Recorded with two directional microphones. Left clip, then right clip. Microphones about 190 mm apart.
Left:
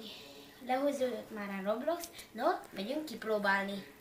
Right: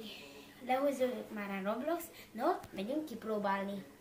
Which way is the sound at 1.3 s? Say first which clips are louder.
Left 2 dB; 5° left (ahead or behind).